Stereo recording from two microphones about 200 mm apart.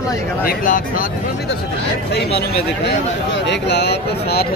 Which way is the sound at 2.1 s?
55° left (ahead or behind).